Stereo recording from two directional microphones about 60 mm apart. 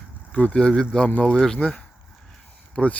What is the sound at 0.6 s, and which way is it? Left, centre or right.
Speech, centre.